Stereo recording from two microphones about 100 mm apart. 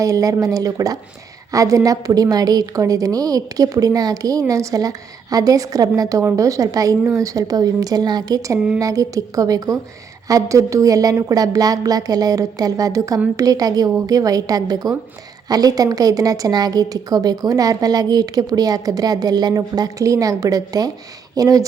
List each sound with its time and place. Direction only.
0.0 s a woman's voice: 35° right (ahead or behind)